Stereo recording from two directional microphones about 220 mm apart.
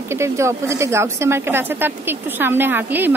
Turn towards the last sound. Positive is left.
turn(degrees=-10)  # may be behind; listen again after turning